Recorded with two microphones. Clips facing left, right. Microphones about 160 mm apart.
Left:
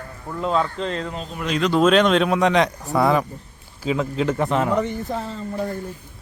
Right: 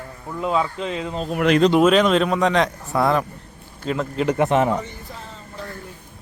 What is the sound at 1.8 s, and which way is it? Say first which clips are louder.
A man's voice: even; 5° right (ahead or behind).